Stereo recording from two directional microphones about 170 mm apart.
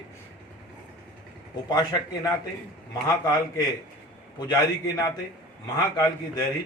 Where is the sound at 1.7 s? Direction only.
20° left (ahead or behind).